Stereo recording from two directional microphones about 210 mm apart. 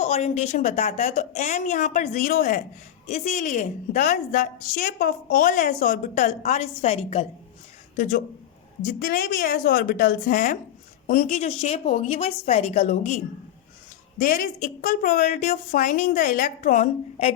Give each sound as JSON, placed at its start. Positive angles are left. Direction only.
{"t": 0.0, "sound": "a woman's voice", "side_deg": 30}